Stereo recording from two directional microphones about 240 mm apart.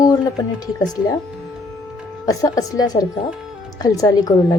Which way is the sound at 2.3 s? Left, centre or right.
Centre.